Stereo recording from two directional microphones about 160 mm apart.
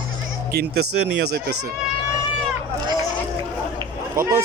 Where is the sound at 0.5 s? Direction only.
90° right.